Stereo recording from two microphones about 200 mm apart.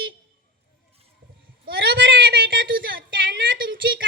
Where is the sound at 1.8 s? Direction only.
60° right (ahead or behind).